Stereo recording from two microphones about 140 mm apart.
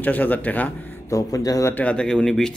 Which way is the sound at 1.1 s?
25° left (ahead or behind).